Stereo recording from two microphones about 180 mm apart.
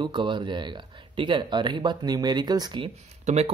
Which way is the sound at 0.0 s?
25° right (ahead or behind).